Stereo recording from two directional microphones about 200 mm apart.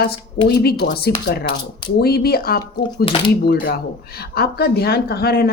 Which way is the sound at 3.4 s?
50° left (ahead or behind).